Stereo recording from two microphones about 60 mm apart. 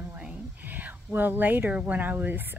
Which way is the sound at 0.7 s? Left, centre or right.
Right.